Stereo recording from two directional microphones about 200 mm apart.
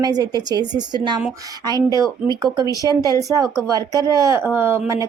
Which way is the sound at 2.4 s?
20° right (ahead or behind).